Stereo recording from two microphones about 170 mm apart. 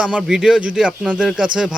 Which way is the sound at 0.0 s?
5° right (ahead or behind).